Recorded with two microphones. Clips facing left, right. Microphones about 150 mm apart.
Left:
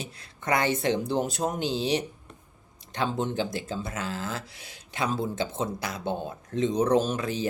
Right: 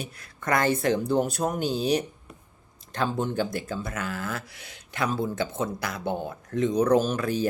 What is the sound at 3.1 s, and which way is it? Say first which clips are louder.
Speech: right 1 dB; 20° left (ahead or behind).